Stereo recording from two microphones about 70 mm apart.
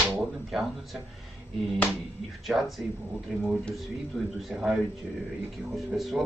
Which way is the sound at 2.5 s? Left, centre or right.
Centre.